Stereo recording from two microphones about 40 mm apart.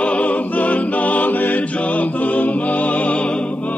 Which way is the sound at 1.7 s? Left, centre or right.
Left.